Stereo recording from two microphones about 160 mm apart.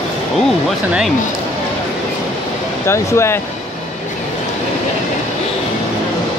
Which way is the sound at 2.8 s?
15° left (ahead or behind).